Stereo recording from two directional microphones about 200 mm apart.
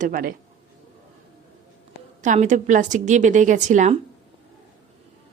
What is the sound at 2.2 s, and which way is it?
Speech, 35° right (ahead or behind).